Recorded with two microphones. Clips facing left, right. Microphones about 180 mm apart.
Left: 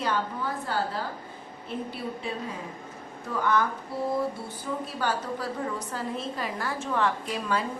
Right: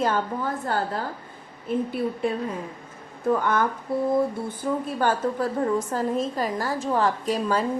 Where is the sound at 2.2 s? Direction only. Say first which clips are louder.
Right 9 dB; 55° right (ahead or behind).